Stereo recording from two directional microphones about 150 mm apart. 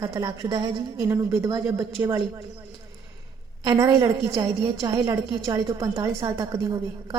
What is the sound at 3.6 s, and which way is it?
A woman's voice, 25° right (ahead or behind).